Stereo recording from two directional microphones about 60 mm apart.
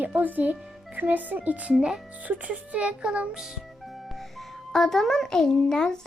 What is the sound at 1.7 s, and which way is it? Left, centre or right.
Speech, centre.